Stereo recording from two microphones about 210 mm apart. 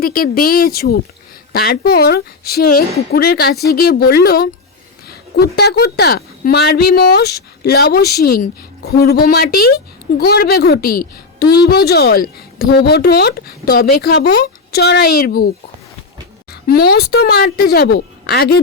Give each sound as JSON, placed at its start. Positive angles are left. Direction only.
{"t": 0.0, "sound": "a woman's voice", "side_deg": 45}
{"t": 16.5, "sound": "a woman's voice", "side_deg": 45}